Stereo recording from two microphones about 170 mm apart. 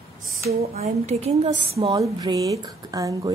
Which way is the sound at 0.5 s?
40° right (ahead or behind).